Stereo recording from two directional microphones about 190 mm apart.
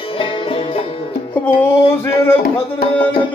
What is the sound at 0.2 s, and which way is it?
Music, 30° left (ahead or behind).